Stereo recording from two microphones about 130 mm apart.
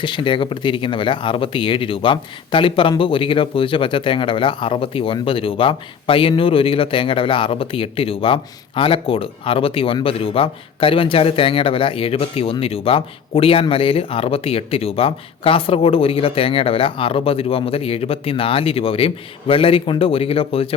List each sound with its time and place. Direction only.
0.0 s speech: 40° left (ahead or behind)